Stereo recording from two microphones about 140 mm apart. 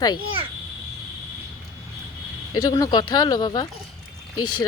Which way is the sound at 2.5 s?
30° left (ahead or behind).